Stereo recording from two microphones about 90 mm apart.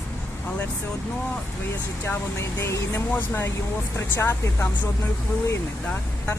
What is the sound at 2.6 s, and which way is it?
Speech, 30° left (ahead or behind).